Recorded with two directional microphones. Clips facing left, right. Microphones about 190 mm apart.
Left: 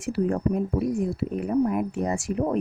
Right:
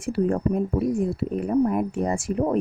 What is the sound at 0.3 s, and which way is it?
Speech, 35° right (ahead or behind).